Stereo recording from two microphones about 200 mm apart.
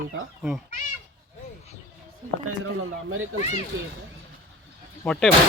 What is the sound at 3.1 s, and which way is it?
Speech, 90° right.